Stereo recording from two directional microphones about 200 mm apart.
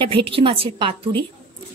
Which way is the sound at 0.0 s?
25° right (ahead or behind).